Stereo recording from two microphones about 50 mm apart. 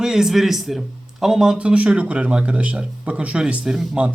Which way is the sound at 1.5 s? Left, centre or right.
Right.